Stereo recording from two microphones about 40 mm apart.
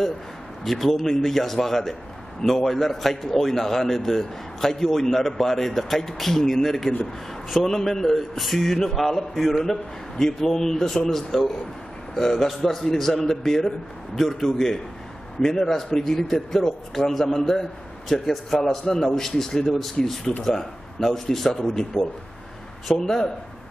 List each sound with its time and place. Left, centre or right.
0.7 s a man's voice: centre